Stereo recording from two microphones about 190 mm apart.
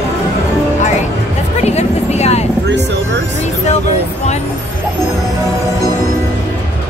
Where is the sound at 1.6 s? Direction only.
35° left (ahead or behind).